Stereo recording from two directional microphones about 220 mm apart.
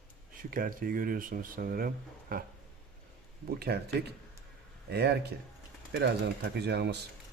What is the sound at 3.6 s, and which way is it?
A man's voice, 45° right (ahead or behind).